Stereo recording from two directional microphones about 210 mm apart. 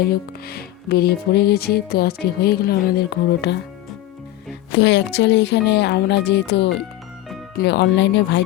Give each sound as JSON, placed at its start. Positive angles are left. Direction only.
{"t": 0.0, "sound": "music", "side_deg": 45}
{"t": 4.7, "sound": "speech", "side_deg": 55}